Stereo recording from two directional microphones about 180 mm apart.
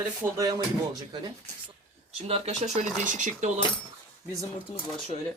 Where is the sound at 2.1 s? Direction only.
35° right (ahead or behind).